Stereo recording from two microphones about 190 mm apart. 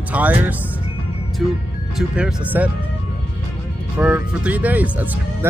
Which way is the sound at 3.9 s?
5° right (ahead or behind).